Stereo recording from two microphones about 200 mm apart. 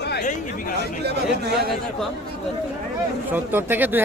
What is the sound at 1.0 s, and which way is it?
Speech, 55° right (ahead or behind).